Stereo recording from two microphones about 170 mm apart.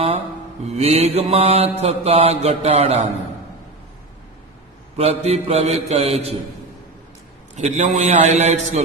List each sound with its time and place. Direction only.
0.7 s mantra: 40° right (ahead or behind)
4.9 s mantra: 40° right (ahead or behind)
7.5 s a man's voice: 40° right (ahead or behind)